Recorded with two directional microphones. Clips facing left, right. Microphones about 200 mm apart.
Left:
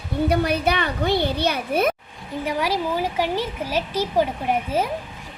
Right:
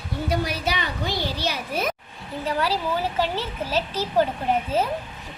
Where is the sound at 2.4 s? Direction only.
15° left (ahead or behind).